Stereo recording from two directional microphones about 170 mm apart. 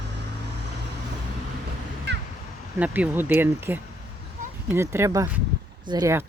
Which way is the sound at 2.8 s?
10° right (ahead or behind).